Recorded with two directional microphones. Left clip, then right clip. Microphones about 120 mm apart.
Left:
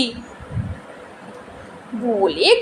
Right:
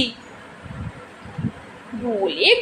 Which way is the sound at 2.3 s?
55° left (ahead or behind).